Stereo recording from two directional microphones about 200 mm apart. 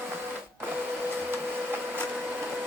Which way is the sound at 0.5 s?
10° right (ahead or behind).